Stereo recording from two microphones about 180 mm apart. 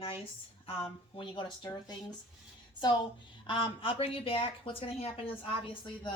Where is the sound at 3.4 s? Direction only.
25° left (ahead or behind).